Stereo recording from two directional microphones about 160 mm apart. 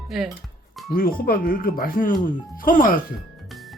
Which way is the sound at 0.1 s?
Centre (ahead or behind).